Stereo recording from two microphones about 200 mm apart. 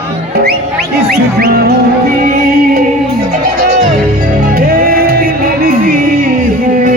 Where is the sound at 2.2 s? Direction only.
40° right (ahead or behind).